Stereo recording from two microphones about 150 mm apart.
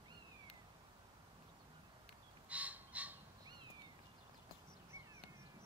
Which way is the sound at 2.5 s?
10° right (ahead or behind).